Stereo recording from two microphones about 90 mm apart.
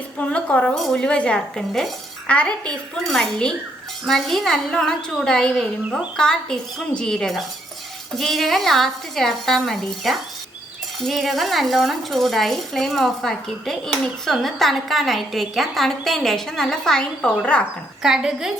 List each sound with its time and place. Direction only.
0.2 s a woman's voice: 15° left (ahead or behind)
18.0 s a woman's voice: 5° right (ahead or behind)